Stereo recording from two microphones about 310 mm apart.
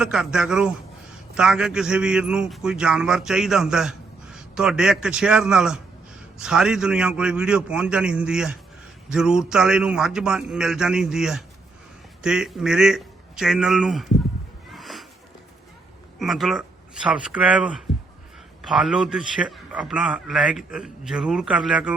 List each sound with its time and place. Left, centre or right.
0.0 s a man's voice: centre
14.7 s a sound: centre
16.1 s a man's voice: centre